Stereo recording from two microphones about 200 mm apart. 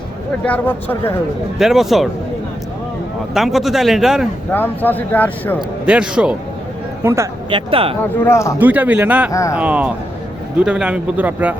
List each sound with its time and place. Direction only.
0.4 s speech: 10° left (ahead or behind)
1.5 s speech: centre (ahead or behind)
3.3 s speech: centre (ahead or behind)
4.5 s speech: 10° left (ahead or behind)
5.5 s speech: 5° right (ahead or behind)
7.5 s speech: 25° right (ahead or behind)
8.0 s speech: 10° left (ahead or behind)
8.5 s a man's voice: 10° right (ahead or behind)